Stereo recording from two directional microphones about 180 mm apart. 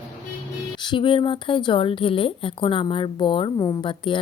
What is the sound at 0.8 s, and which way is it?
A woman's voice, 30° left (ahead or behind).